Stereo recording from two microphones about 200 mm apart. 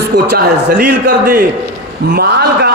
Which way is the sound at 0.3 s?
50° right (ahead or behind).